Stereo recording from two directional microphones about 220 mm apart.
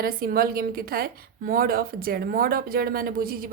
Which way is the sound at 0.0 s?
40° right (ahead or behind).